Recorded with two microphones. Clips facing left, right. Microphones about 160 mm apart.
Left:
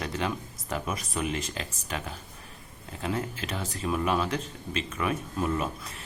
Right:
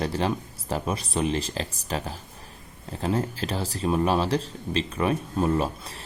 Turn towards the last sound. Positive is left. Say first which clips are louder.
# right 5 dB
turn(degrees=-30)  # may be behind; listen again after turning